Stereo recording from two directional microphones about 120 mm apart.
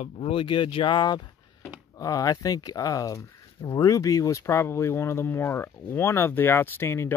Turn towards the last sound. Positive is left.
turn(degrees=20)  # may be behind; listen again after turning